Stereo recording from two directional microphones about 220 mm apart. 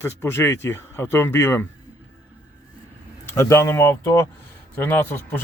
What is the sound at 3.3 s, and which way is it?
Speech, 15° left (ahead or behind).